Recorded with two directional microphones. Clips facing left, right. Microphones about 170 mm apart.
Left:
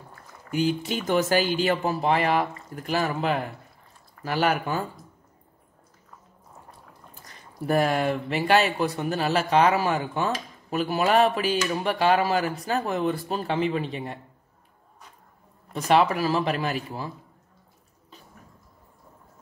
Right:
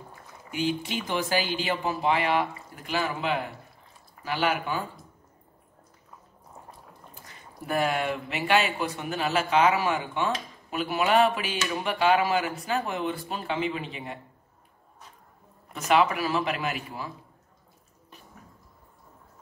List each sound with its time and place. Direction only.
0.5 s speech: 40° left (ahead or behind)
7.2 s speech: 40° left (ahead or behind)
15.9 s speech: 35° left (ahead or behind)